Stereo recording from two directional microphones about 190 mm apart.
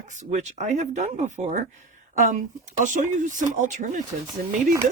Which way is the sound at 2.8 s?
40° right (ahead or behind).